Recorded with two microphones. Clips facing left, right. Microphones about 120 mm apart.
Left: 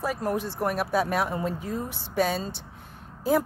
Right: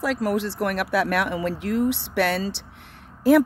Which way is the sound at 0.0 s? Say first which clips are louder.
Right 4 dB; 90° right.